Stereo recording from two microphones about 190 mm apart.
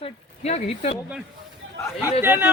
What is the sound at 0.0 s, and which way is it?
Speech, 35° left (ahead or behind).